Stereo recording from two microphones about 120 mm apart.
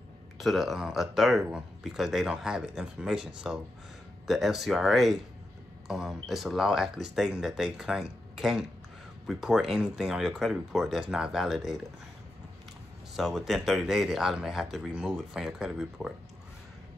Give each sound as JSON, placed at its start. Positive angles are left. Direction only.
{"t": 0.4, "sound": "speech", "side_deg": 0}
{"t": 13.1, "sound": "speech", "side_deg": 0}